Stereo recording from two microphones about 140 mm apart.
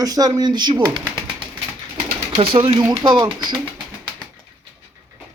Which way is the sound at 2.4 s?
40° right (ahead or behind).